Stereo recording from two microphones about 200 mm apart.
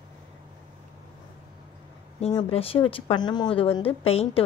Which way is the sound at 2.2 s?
30° left (ahead or behind).